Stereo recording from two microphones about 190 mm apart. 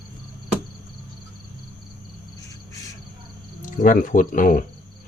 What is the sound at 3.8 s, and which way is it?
Speech, 40° left (ahead or behind).